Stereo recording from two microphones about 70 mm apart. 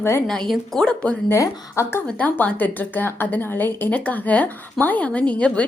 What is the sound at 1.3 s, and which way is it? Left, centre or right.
Speech, left.